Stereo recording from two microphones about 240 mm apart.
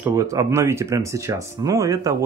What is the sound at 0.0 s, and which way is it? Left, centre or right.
Speech, centre.